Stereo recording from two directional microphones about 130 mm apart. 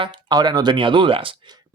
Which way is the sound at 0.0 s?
35° right (ahead or behind).